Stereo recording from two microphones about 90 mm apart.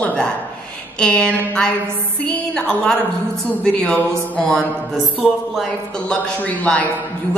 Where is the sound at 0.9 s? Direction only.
10° left (ahead or behind).